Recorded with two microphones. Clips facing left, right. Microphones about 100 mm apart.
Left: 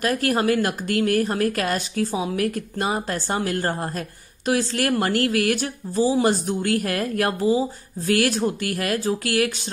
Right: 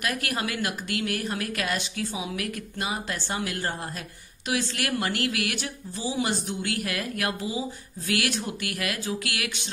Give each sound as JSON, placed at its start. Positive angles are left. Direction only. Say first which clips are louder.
{"t": 0.0, "sound": "a woman's voice", "louder": "left 9 dB", "side_deg": 35}